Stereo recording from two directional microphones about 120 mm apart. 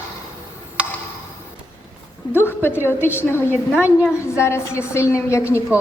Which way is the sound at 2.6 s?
20° left (ahead or behind).